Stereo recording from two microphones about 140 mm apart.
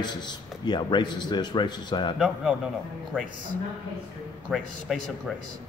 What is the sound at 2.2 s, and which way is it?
Speech, 5° right (ahead or behind).